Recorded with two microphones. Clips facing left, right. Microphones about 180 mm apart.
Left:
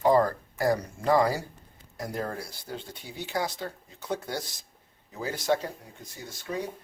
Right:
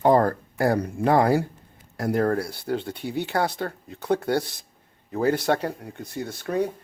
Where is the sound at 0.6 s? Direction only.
60° right (ahead or behind).